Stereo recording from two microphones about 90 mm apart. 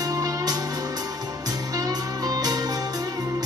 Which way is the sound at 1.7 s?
45° right (ahead or behind).